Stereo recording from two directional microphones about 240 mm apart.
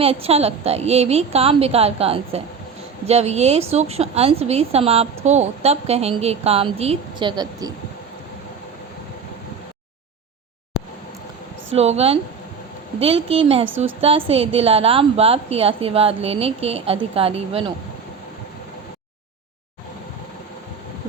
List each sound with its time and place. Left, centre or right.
0.0 s a woman's voice: right
11.7 s a woman's voice: right